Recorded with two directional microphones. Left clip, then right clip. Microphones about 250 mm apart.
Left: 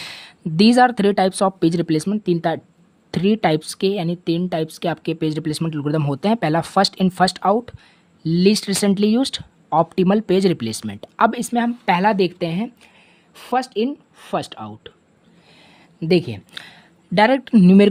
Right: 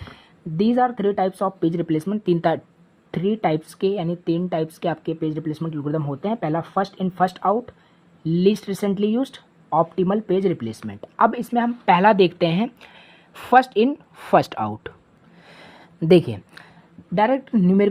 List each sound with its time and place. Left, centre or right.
0.5 s speech: left
1.3 s speech: left
1.5 s a woman's voice: left; by 14.9 s centre
15.4 s a sound: centre
16.0 s a woman's voice: centre
17.2 s speech: left